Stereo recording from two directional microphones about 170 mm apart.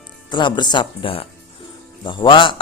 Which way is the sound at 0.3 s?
25° left (ahead or behind).